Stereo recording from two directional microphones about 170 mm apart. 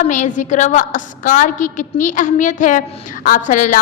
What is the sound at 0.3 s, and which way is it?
A woman's voice, 45° left (ahead or behind).